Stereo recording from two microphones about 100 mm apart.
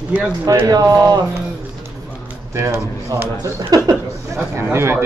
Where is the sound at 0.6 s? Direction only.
40° right (ahead or behind).